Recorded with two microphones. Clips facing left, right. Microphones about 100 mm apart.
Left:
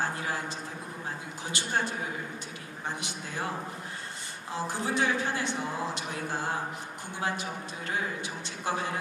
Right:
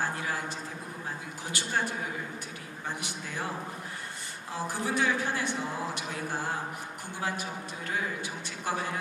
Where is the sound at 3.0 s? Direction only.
20° left (ahead or behind).